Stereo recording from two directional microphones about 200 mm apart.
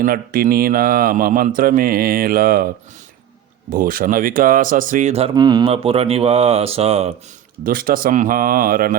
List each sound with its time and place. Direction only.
0.0 s speech: 45° right (ahead or behind)
3.7 s speech: 45° right (ahead or behind)
5.3 s speech: 20° right (ahead or behind)
7.6 s speech: 45° right (ahead or behind)